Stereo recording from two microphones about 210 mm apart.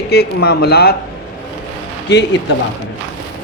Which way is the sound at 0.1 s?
50° left (ahead or behind).